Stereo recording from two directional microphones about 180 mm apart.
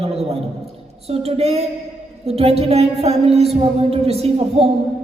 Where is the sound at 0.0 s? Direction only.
35° right (ahead or behind).